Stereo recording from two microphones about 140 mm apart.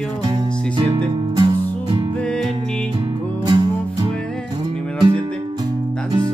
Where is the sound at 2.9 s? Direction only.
30° right (ahead or behind).